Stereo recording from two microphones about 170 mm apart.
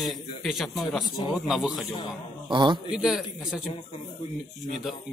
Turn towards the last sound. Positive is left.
turn(degrees=-5)  # may be behind; listen again after turning